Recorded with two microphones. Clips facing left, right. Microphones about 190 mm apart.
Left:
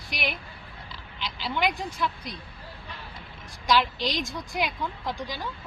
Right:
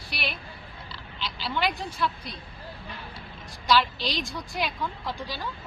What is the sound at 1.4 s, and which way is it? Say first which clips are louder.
Speech: left 1 dB; 15° left (ahead or behind).